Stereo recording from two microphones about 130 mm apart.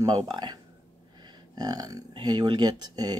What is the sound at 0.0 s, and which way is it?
Speech, 30° right (ahead or behind).